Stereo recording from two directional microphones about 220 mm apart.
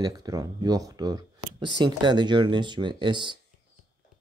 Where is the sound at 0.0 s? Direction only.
15° right (ahead or behind).